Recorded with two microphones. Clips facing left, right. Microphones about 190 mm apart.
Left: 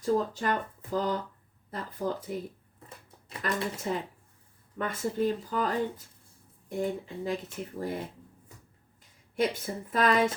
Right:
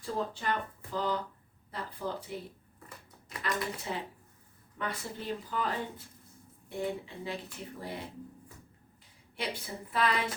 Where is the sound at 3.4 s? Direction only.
45° left (ahead or behind).